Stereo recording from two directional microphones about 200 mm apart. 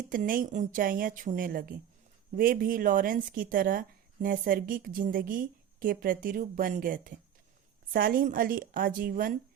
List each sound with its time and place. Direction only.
0.1 s speech: 45° right (ahead or behind)